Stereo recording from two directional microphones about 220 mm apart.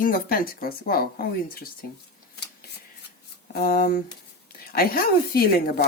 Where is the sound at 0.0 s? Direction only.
40° left (ahead or behind).